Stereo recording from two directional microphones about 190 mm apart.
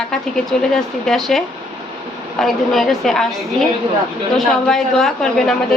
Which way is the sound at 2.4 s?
Centre (ahead or behind).